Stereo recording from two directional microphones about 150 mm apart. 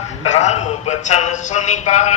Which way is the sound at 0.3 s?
50° left (ahead or behind).